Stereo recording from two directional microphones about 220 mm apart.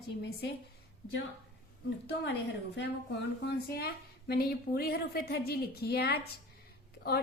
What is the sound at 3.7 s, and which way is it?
A woman's voice, 45° left (ahead or behind).